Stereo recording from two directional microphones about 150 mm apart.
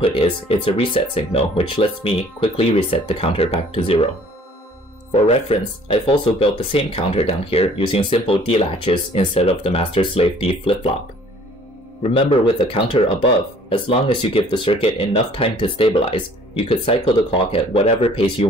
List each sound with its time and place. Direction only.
0.0 s speech: 40° left (ahead or behind)
5.1 s speech: 40° left (ahead or behind)
12.0 s speech: 40° left (ahead or behind)